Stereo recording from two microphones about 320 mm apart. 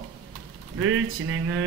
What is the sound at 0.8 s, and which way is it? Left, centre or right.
Speech, right.